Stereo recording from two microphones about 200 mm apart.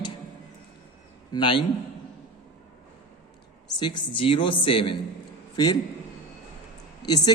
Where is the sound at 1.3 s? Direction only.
25° left (ahead or behind).